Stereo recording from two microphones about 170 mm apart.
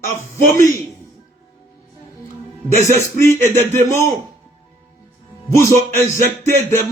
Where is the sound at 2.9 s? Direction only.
15° left (ahead or behind).